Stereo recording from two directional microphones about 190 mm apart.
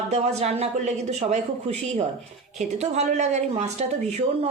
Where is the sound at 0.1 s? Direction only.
35° right (ahead or behind).